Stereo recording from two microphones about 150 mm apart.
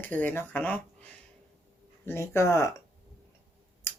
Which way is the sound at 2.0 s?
15° left (ahead or behind).